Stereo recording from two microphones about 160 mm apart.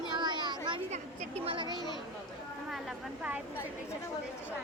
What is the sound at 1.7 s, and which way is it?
Speech, 25° left (ahead or behind).